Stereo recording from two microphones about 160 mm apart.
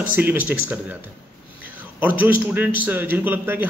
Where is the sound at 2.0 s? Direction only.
10° right (ahead or behind).